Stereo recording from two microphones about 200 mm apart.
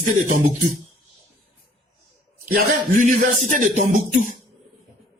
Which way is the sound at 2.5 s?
40° right (ahead or behind).